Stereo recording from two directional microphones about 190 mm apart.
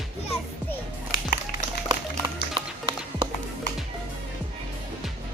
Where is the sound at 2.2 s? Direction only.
25° right (ahead or behind).